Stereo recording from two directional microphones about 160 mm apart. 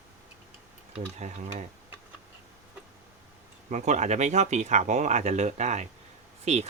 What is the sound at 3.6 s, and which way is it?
Speech, 50° right (ahead or behind).